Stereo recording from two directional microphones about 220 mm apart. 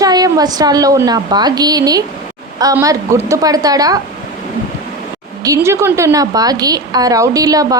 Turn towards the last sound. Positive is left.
turn(degrees=-15)  # may be behind; listen again after turning